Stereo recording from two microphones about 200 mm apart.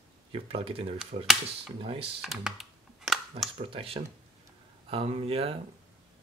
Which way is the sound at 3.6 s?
25° right (ahead or behind).